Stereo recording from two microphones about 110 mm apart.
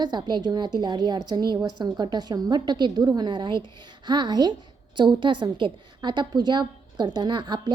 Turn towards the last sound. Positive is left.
turn(degrees=-40)  # may be behind; listen again after turning